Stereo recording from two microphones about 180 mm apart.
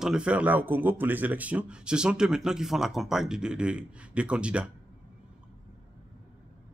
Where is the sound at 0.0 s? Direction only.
5° right (ahead or behind).